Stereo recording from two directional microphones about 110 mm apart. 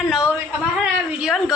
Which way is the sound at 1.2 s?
5° right (ahead or behind).